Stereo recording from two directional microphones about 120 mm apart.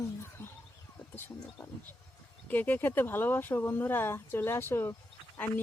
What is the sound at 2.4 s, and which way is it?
Speech, 15° left (ahead or behind).